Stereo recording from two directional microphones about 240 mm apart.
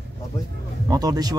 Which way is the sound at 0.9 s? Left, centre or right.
Centre.